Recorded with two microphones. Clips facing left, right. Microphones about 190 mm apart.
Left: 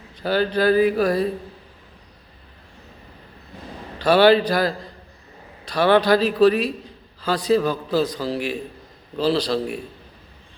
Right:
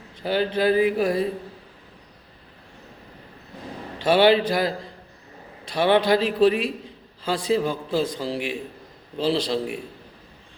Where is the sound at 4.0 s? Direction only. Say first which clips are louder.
Left 2 dB; 25° right (ahead or behind).